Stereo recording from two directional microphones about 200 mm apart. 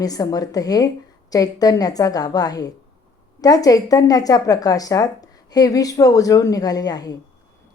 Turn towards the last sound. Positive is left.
turn(degrees=20)  # may be behind; listen again after turning